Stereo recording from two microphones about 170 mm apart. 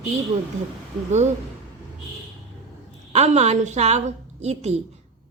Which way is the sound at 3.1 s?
40° right (ahead or behind).